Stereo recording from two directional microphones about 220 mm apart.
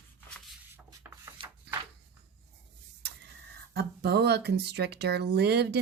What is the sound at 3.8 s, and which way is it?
Speech, 50° right (ahead or behind).